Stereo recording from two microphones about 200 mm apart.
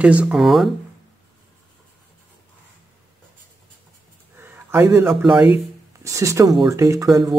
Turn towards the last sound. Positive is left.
turn(degrees=-15)  # may be behind; listen again after turning